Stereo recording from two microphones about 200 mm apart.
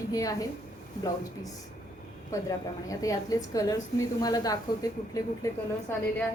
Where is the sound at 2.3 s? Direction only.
15° left (ahead or behind).